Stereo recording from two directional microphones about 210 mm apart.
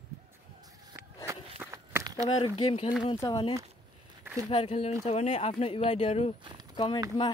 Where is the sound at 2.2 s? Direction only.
25° left (ahead or behind).